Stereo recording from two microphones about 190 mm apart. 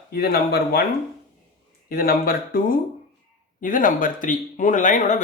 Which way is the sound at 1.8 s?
50° left (ahead or behind).